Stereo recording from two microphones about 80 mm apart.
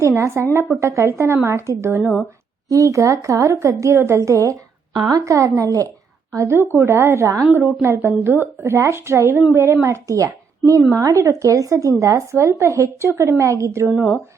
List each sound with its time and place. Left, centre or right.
0.2 s speech: right
4.9 s a woman's voice: right
6.3 s speech: right
7.4 s speech: right
9.8 s a woman's voice: right